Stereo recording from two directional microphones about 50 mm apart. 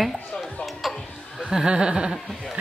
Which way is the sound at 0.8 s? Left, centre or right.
Centre.